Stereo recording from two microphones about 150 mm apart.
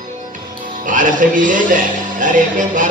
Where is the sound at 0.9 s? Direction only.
60° right (ahead or behind).